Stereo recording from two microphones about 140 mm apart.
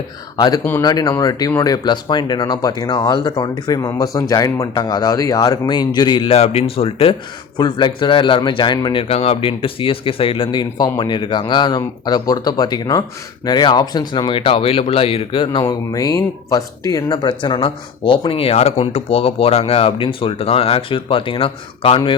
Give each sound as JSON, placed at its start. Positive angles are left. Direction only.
{"t": 0.3, "sound": "speech", "side_deg": 30}
{"t": 15.6, "sound": "speech", "side_deg": 25}